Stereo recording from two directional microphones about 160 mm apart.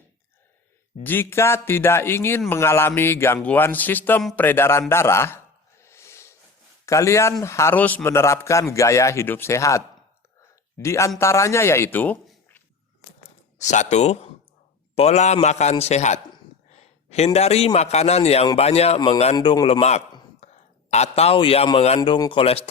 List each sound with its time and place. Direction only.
1.0 s a man's voice: 15° left (ahead or behind)
4.2 s speech: centre (ahead or behind)
4.4 s a man's voice: 15° left (ahead or behind)
5.8 s snort: 15° left (ahead or behind)
6.8 s a man's voice: 20° left (ahead or behind)
13.6 s a man's voice: 45° left (ahead or behind)
16.7 s a sound: 45° left (ahead or behind)
17.7 s a man's voice: 45° left (ahead or behind)
18.9 s a man's voice: 25° left (ahead or behind)
20.4 s a man's voice: 45° left (ahead or behind)